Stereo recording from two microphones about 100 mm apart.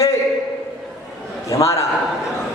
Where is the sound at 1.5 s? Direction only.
30° left (ahead or behind).